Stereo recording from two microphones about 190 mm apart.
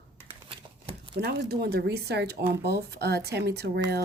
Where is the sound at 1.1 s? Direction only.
60° right (ahead or behind).